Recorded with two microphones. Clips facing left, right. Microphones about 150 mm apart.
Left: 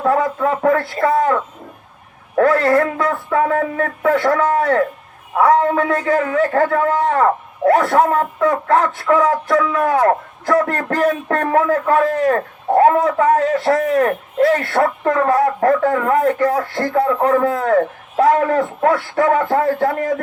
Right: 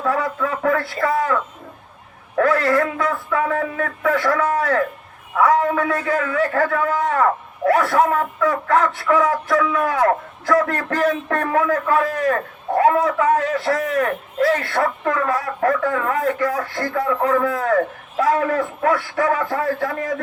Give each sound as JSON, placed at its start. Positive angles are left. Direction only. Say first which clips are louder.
{"t": 0.0, "sound": "a man's voice", "louder": "left 5 dB", "side_deg": 30}
{"t": 2.4, "sound": "a man's voice", "louder": "left 4 dB", "side_deg": 25}
{"t": 8.7, "sound": "a man's voice", "louder": "left 1 dB", "side_deg": 25}
{"t": 10.4, "sound": "a man's voice", "louder": "left 2 dB", "side_deg": 25}
{"t": 11.3, "sound": "a man's voice", "louder": "left 3 dB", "side_deg": 30}
{"t": 14.4, "sound": "a man's voice", "louder": "left 4 dB", "side_deg": 25}
{"t": 14.7, "sound": "a man's voice", "louder": "left 4 dB", "side_deg": 45}